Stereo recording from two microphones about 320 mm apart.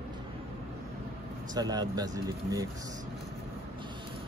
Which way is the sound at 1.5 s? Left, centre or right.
Centre.